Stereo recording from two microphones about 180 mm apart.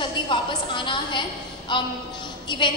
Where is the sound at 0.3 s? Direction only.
25° left (ahead or behind).